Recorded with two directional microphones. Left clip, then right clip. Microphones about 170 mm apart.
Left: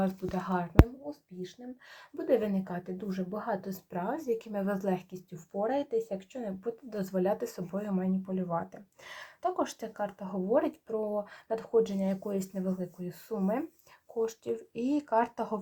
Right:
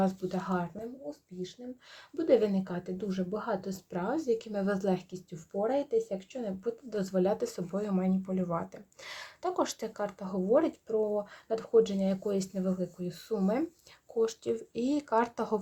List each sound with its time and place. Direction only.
0.0 s speech: 25° right (ahead or behind)
2.1 s speech: 35° right (ahead or behind)
7.7 s speech: 40° right (ahead or behind)